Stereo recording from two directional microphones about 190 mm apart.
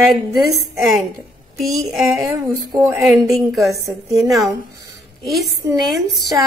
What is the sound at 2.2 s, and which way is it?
Music, 15° right (ahead or behind).